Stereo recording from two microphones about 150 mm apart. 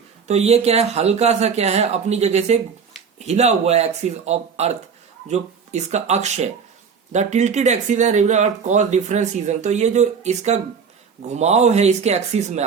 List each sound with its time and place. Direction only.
0.3 s speech: 45° right (ahead or behind)